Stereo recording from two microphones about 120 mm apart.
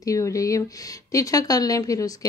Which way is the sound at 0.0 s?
30° left (ahead or behind).